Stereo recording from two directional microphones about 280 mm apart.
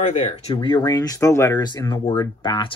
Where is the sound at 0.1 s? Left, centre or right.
Left.